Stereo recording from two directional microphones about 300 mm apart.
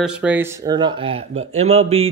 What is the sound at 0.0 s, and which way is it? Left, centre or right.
Speech, centre.